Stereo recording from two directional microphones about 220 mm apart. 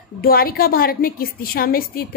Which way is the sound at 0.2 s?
40° left (ahead or behind).